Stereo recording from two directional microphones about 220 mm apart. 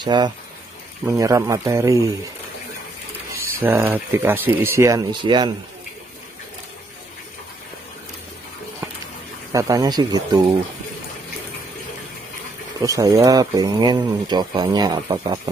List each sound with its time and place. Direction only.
0.0 s speech: 20° right (ahead or behind)
3.5 s speech: 10° right (ahead or behind)
9.5 s speech: 15° right (ahead or behind)
12.8 s speech: 15° right (ahead or behind)